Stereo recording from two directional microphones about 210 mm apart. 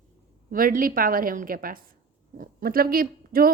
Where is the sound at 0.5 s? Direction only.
40° right (ahead or behind).